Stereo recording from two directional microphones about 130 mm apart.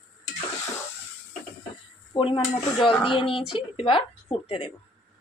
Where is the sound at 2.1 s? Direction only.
35° left (ahead or behind).